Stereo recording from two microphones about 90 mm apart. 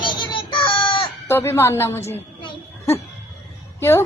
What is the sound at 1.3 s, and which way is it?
Speech, 30° left (ahead or behind).